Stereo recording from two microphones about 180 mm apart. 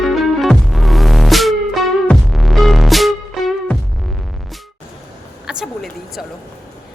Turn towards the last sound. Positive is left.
turn(degrees=0)  # may be behind; listen again after turning